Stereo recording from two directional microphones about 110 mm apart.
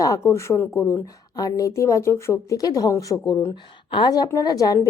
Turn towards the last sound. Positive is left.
turn(degrees=35)  # may be behind; listen again after turning